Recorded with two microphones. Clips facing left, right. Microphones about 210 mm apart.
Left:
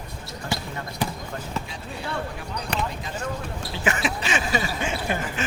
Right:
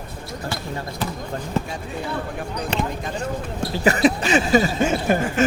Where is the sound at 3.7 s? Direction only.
40° right (ahead or behind).